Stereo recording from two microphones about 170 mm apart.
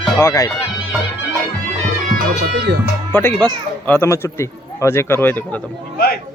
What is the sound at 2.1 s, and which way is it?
Speech, 65° right (ahead or behind).